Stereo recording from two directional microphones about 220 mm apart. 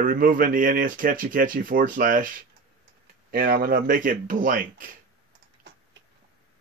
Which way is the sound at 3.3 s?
45° right (ahead or behind).